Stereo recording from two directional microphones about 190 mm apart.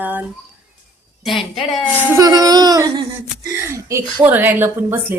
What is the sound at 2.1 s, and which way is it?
A woman's voice, 20° right (ahead or behind).